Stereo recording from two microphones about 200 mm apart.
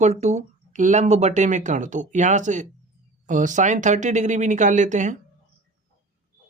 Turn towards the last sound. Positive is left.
turn(degrees=-40)  # may be behind; listen again after turning